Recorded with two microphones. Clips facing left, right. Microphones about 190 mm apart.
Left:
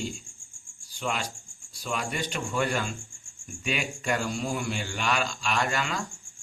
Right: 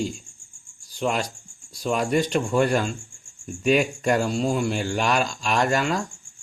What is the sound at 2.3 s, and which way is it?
Speech, 45° right (ahead or behind).